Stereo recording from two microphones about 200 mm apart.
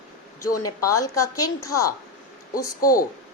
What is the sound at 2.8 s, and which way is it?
Speech, 45° left (ahead or behind).